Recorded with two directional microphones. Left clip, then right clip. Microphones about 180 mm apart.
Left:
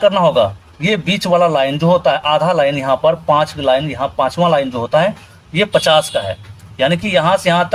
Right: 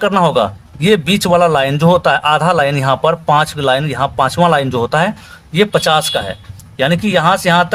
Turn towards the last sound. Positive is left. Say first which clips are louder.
# right 2 dB
turn(degrees=-30)  # may be behind; listen again after turning